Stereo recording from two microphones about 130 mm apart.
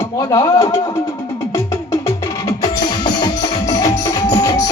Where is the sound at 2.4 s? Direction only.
35° left (ahead or behind).